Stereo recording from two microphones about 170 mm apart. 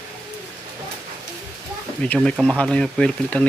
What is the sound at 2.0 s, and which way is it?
Speech, 5° left (ahead or behind).